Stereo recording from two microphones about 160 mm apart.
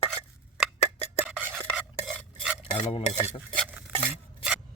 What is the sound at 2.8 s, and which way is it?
Cutlery, 35° left (ahead or behind).